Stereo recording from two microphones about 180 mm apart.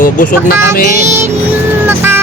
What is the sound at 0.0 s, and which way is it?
Speech, 50° left (ahead or behind).